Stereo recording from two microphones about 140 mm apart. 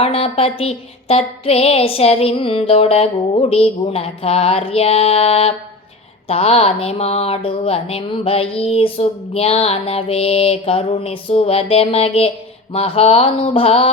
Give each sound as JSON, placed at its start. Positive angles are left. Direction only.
{"t": 0.0, "sound": "speech", "side_deg": 45}